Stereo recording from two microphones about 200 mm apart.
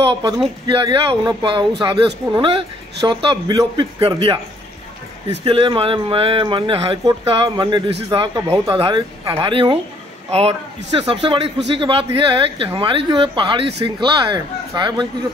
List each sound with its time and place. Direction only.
0.1 s a man's voice: 20° right (ahead or behind)
10.9 s a man's voice: 25° right (ahead or behind)